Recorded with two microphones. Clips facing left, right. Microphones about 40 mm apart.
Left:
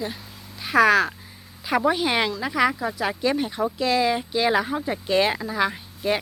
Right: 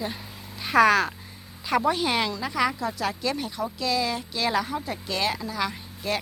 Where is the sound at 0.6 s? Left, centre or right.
Centre.